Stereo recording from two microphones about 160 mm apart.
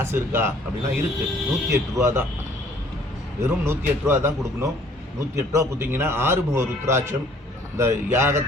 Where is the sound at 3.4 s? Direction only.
15° right (ahead or behind).